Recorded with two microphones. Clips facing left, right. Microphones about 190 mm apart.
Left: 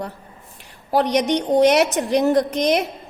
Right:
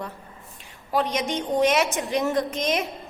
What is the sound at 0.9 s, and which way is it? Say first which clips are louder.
A woman's voice: left 7 dB; 70° left (ahead or behind).